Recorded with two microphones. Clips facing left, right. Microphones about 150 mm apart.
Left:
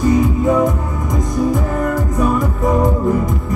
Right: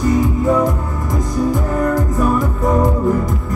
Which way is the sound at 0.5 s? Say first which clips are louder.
Left 1 dB; centre (ahead or behind).